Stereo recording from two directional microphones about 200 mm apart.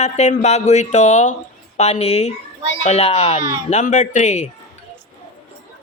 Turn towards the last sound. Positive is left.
turn(degrees=35)  # may be behind; listen again after turning